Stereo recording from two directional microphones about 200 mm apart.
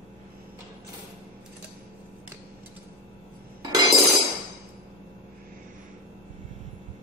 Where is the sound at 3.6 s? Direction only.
20° right (ahead or behind).